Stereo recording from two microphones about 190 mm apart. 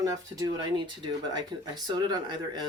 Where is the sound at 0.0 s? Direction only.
20° right (ahead or behind).